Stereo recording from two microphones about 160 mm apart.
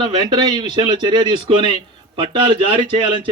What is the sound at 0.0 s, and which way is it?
A man's voice, 25° right (ahead or behind).